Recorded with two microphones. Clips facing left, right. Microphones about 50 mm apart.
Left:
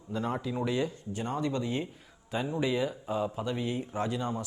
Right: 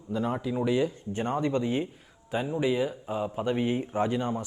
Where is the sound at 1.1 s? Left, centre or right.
Right.